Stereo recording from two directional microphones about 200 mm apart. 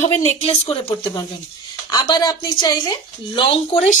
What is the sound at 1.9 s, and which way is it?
A woman's voice, 20° left (ahead or behind).